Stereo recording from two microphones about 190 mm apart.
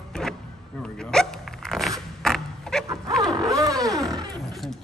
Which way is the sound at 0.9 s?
5° left (ahead or behind).